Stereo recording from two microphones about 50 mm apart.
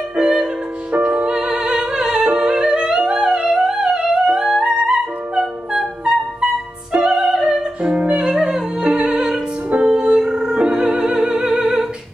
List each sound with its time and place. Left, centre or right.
0.1 s music: right
4.4 s music: centre
8.2 s music: centre
9.7 s music: right